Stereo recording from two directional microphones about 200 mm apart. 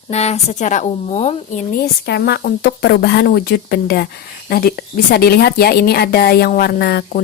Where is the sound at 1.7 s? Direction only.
50° left (ahead or behind).